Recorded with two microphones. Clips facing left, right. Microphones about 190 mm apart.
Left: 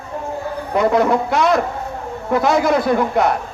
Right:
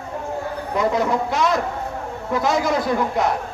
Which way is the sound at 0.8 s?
60° left (ahead or behind).